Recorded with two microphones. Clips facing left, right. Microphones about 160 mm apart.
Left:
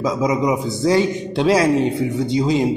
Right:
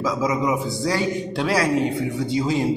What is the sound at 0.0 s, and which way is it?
A man's voice, 20° left (ahead or behind).